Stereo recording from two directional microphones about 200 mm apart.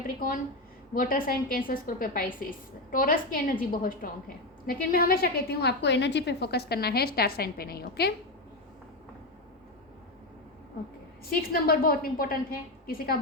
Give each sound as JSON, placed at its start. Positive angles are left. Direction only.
{"t": 0.9, "sound": "a woman's voice", "side_deg": 45}
{"t": 11.3, "sound": "a woman's voice", "side_deg": 50}